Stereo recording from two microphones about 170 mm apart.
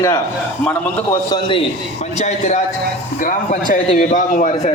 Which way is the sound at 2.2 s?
45° left (ahead or behind).